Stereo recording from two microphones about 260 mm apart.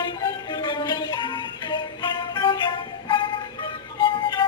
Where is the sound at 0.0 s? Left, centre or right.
Centre.